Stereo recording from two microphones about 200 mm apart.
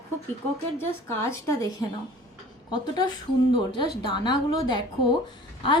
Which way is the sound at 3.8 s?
20° left (ahead or behind).